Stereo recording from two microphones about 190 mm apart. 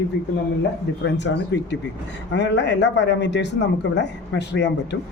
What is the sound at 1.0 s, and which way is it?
Speech, 65° left (ahead or behind).